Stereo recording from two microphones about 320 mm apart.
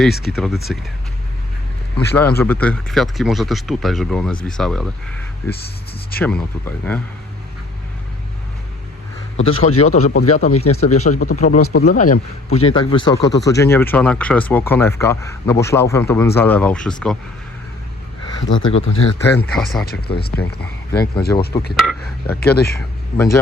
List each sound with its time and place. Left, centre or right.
0.0 s speech: centre
2.4 s speech: centre
6.1 s speech: centre
9.4 s speech: left
10.2 s speech: left
10.5 s speech: left
10.8 s speech: left; by 17.2 s centre
18.4 s speech: left
19.2 s speech: centre
19.8 s speech: left
21.2 s speech: centre
22.4 s speech: left
23.1 s speech: centre